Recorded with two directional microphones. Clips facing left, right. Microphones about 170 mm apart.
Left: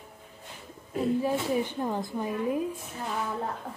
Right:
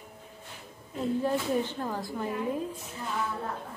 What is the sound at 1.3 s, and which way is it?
Speech, 15° left (ahead or behind).